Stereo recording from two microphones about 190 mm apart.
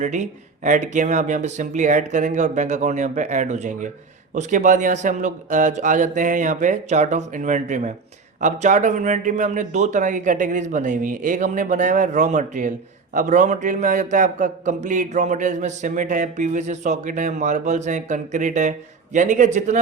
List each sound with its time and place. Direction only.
0.0 s a man's voice: 40° right (ahead or behind)